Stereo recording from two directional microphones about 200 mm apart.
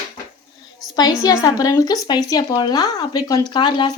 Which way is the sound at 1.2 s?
15° left (ahead or behind).